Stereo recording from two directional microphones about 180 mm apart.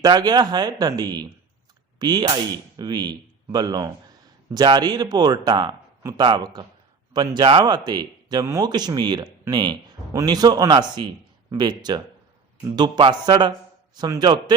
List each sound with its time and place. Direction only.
0.0 s speech: 20° right (ahead or behind)